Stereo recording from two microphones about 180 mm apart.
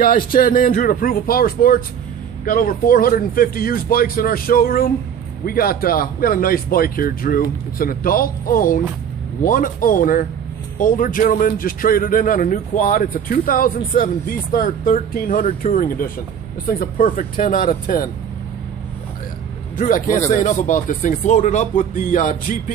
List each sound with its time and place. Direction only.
0.0 s speech: 55° left (ahead or behind)
20.3 s speech: 45° left (ahead or behind)